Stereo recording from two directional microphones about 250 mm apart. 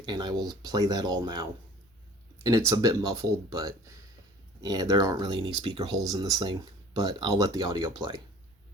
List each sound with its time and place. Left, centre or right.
0.0 s speech: centre